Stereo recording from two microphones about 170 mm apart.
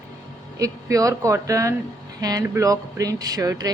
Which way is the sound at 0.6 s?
20° right (ahead or behind).